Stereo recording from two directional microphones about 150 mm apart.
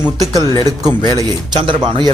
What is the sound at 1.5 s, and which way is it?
Speech, 30° right (ahead or behind).